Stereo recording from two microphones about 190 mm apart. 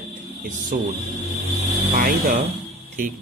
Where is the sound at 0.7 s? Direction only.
45° right (ahead or behind).